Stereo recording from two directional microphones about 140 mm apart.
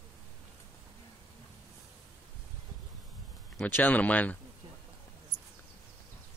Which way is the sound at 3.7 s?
10° left (ahead or behind).